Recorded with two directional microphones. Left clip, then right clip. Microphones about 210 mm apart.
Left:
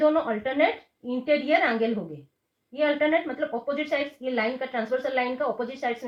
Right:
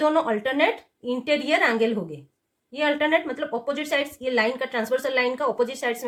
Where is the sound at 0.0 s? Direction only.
50° right (ahead or behind).